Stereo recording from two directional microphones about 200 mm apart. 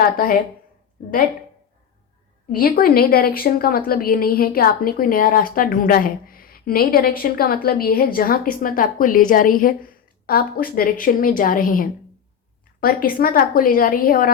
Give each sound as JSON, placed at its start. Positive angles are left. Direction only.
{"t": 0.0, "sound": "a woman's voice", "side_deg": 45}
{"t": 2.5, "sound": "a woman's voice", "side_deg": 45}